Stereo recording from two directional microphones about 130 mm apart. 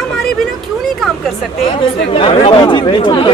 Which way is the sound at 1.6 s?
45° left (ahead or behind).